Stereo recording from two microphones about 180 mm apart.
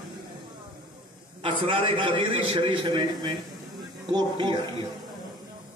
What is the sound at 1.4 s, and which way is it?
A man's voice, 30° right (ahead or behind).